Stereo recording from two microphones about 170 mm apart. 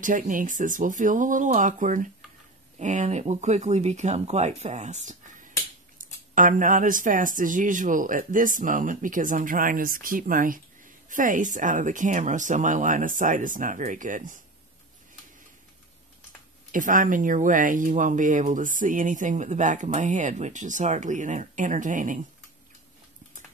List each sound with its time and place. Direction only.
0.0 s speech: 50° right (ahead or behind)
16.7 s speech: 50° right (ahead or behind)